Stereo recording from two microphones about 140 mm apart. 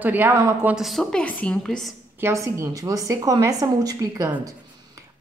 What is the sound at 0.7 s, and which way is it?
A woman's voice, centre (ahead or behind).